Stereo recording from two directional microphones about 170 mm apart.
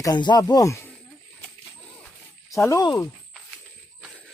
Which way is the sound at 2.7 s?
20° left (ahead or behind).